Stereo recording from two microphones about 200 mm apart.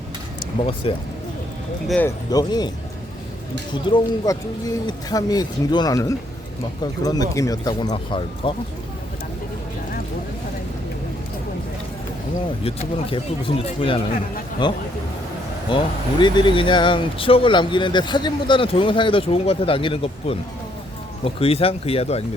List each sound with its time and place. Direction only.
0.8 s speech: 30° left (ahead or behind)
1.9 s speech: 10° left (ahead or behind)
2.3 s speech: 20° left (ahead or behind)
3.8 s speech: 20° left (ahead or behind)
12.6 s speech: 25° left (ahead or behind)